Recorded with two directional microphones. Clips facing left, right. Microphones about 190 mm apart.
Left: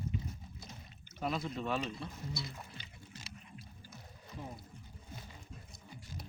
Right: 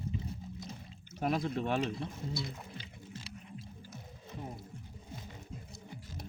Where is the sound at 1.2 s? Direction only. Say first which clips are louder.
Right 4 dB; 50° right (ahead or behind).